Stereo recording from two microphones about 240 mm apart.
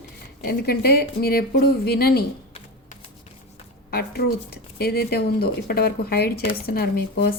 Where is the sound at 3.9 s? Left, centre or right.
Left.